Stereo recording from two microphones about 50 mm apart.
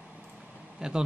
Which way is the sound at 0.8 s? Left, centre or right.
Centre.